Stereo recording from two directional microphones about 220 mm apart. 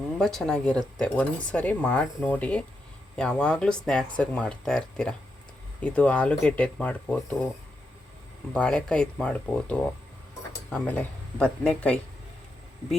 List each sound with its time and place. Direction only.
0.2 s speech: centre (ahead or behind)
8.5 s speech: 5° left (ahead or behind)